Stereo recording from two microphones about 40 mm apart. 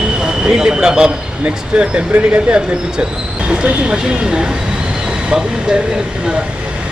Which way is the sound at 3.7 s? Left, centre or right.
Right.